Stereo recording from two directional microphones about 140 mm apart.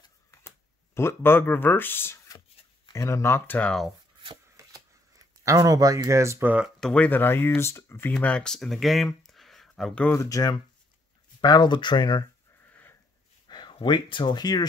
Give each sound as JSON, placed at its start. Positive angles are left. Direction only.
{"t": 0.9, "sound": "speech", "side_deg": 15}
{"t": 4.6, "sound": "a sound", "side_deg": -25}
{"t": 6.8, "sound": "speech", "side_deg": 5}
{"t": 8.1, "sound": "speech", "side_deg": 10}
{"t": 10.1, "sound": "speech", "side_deg": 25}
{"t": 13.5, "sound": "speech", "side_deg": 30}